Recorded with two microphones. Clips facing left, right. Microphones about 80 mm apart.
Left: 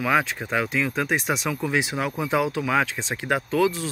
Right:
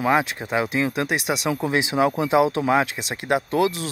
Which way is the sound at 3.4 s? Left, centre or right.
Right.